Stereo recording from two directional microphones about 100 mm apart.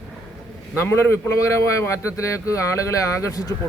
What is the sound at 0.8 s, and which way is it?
Speech, 25° left (ahead or behind).